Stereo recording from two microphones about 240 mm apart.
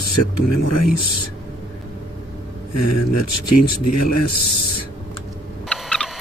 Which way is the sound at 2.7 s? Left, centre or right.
Left.